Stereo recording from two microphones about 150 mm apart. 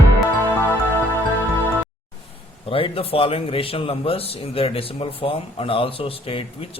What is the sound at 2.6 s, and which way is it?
A man's voice, 35° left (ahead or behind).